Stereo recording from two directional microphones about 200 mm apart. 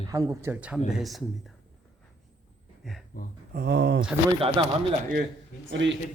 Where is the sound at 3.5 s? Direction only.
55° right (ahead or behind).